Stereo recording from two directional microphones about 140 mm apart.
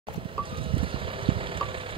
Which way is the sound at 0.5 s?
40° right (ahead or behind).